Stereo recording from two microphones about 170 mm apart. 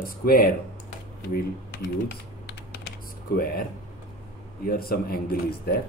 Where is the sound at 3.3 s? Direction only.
60° left (ahead or behind).